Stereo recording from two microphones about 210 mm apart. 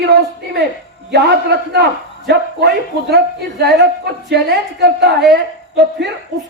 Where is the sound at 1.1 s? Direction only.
50° right (ahead or behind).